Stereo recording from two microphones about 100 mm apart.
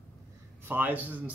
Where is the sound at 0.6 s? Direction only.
20° right (ahead or behind).